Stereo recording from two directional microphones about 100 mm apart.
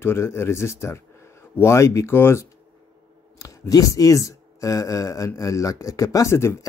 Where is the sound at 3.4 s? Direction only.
35° left (ahead or behind).